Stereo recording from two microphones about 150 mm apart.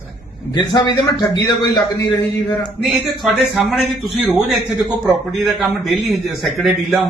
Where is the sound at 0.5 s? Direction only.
30° left (ahead or behind).